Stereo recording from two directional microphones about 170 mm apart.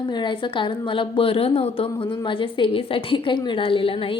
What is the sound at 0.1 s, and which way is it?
A woman's voice, 30° left (ahead or behind).